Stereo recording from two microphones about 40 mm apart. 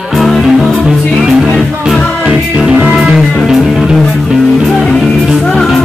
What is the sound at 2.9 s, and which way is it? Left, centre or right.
Music, centre.